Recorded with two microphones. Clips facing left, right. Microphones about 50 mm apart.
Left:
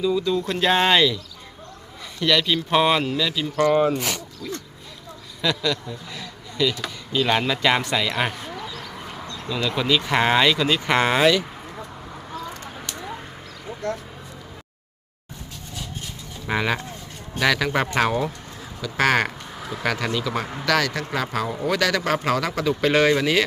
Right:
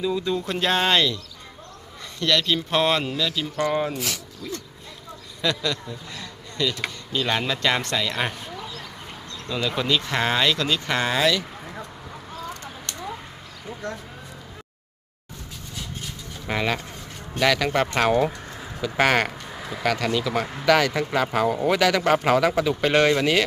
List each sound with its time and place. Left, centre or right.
0.0 s speech: centre
0.4 s speech: centre
2.2 s speech: centre
4.4 s a man's voice: centre
9.6 s speech: centre
10.1 s speech: centre
10.8 s speech: left
16.5 s speech: centre
18.8 s speech: centre
20.7 s speech: centre